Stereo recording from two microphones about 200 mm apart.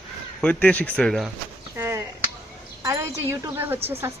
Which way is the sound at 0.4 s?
5° left (ahead or behind).